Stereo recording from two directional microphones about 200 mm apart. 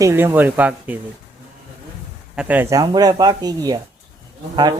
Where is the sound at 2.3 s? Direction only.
10° right (ahead or behind).